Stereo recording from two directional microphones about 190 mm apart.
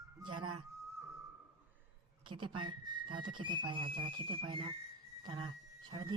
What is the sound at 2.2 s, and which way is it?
Speech, 25° right (ahead or behind).